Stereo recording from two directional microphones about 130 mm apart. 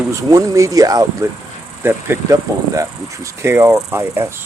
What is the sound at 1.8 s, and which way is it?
Speech, 15° right (ahead or behind).